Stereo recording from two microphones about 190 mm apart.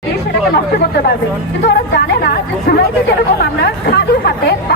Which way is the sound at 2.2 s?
55° left (ahead or behind).